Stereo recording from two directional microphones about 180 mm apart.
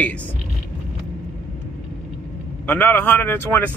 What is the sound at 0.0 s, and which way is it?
Speech, 10° left (ahead or behind).